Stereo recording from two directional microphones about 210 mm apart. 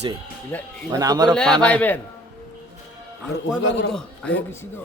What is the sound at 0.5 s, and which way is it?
Speech, 10° left (ahead or behind).